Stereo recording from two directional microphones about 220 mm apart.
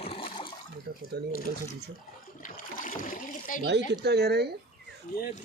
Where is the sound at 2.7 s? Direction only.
40° left (ahead or behind).